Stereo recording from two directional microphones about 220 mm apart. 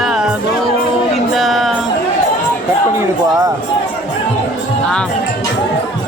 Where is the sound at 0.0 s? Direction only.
Centre (ahead or behind).